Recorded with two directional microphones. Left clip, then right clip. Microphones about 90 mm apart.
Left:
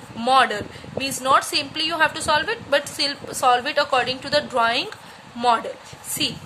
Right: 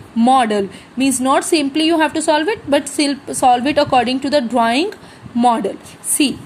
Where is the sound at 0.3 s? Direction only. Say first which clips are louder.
Right 3 dB; 30° right (ahead or behind).